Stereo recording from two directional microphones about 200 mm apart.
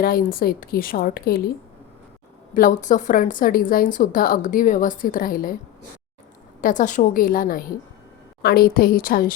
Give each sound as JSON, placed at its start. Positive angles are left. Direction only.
{"t": 0.0, "sound": "a woman's voice", "side_deg": 50}
{"t": 2.6, "sound": "a woman's voice", "side_deg": 40}
{"t": 6.6, "sound": "a woman's voice", "side_deg": 40}